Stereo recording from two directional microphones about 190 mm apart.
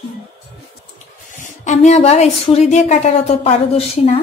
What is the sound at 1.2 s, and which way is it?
Speech, 40° left (ahead or behind).